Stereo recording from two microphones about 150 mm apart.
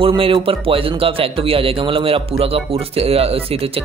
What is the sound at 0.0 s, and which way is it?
Speech, 35° right (ahead or behind).